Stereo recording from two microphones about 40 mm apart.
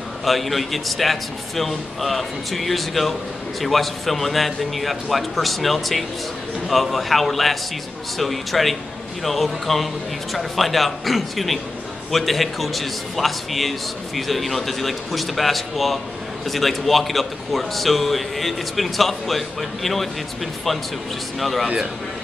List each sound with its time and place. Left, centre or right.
0.2 s a man's voice: centre
21.4 s a man's voice: centre